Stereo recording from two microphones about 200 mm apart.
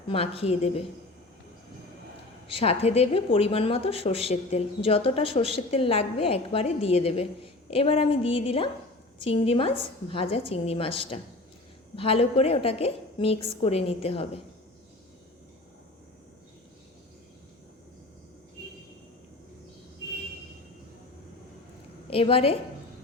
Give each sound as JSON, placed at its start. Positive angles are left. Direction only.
{"t": 0.1, "sound": "a woman's voice", "side_deg": 30}
{"t": 2.5, "sound": "a woman's voice", "side_deg": 30}
{"t": 22.1, "sound": "a woman's voice", "side_deg": 30}